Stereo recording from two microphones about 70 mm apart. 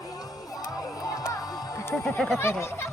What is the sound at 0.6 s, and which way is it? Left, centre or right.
Music, left.